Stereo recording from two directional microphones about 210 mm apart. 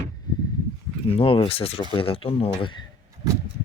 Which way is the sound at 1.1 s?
25° left (ahead or behind).